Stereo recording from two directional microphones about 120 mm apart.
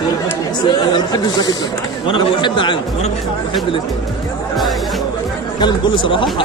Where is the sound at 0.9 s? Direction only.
35° left (ahead or behind).